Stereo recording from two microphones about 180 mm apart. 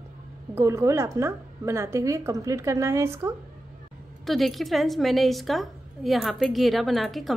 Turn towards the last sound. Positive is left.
turn(degrees=0)  # may be behind; listen again after turning